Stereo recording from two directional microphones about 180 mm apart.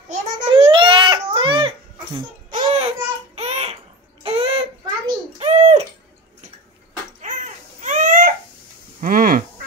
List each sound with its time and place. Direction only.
0.5 s baby cry: 30° right (ahead or behind)
2.5 s a sound: 35° right (ahead or behind)
7.2 s babbling: 40° right (ahead or behind)
9.0 s goose: 50° right (ahead or behind)